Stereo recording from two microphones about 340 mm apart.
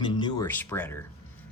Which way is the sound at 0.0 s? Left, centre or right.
Centre.